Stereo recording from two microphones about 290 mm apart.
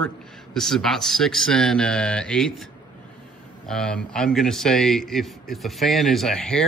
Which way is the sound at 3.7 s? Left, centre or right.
Centre.